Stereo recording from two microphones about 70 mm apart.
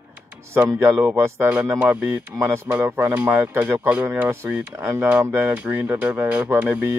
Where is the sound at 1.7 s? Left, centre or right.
Right.